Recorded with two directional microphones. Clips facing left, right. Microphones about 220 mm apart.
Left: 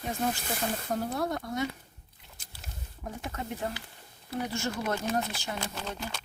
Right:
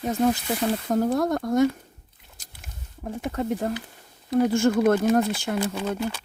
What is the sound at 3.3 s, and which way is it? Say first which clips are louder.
Speech: right 10 dB; 45° right (ahead or behind).